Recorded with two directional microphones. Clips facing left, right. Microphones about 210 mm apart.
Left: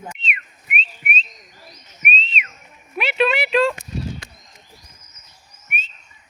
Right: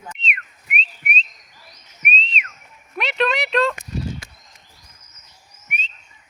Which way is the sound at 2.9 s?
5° left (ahead or behind).